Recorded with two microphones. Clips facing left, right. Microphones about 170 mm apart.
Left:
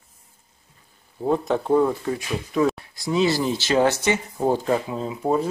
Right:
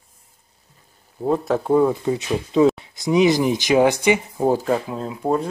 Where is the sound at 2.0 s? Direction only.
25° right (ahead or behind).